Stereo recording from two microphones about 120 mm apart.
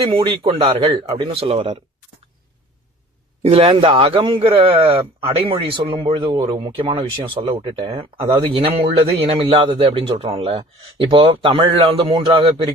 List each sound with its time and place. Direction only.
0.0 s speech: 45° right (ahead or behind)
3.4 s speech: 50° right (ahead or behind)